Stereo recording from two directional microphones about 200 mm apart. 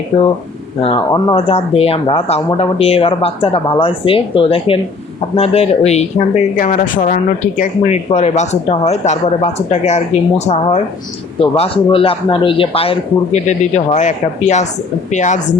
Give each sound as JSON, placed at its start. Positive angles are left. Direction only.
{"t": 0.1, "sound": "speech", "side_deg": 25}